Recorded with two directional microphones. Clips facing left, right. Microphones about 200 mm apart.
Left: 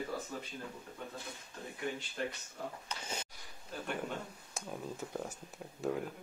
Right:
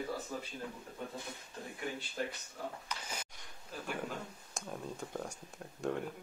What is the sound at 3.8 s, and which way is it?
A man's voice, centre (ahead or behind).